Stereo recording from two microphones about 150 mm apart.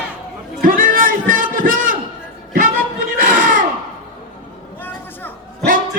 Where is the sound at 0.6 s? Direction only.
65° right (ahead or behind).